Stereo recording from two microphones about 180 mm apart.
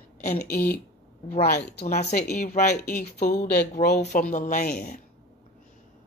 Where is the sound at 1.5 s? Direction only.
65° left (ahead or behind).